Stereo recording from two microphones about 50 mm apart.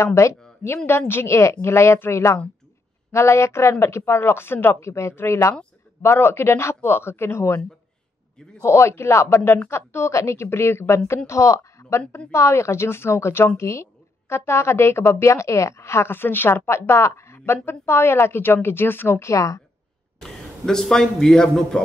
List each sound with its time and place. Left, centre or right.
0.0 s a woman's voice: left
0.8 s a woman's voice: left
4.9 s a woman's voice: left
6.0 s a woman's voice: left
8.6 s a woman's voice: left
11.2 s speech: left
12.3 s a woman's voice: left
13.6 s a woman's voice: left
14.3 s a woman's voice: left
20.2 s a man's voice: centre